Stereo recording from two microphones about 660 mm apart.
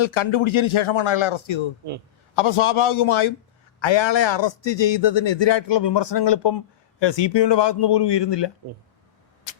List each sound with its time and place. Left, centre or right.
0.0 s a man's voice: left